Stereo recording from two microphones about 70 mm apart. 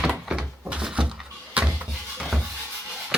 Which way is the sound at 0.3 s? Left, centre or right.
Centre.